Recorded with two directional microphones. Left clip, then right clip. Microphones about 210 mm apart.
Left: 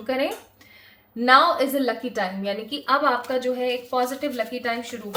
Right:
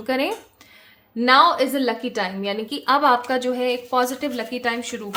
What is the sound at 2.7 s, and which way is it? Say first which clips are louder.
A woman's voice: right 4 dB; 40° right (ahead or behind).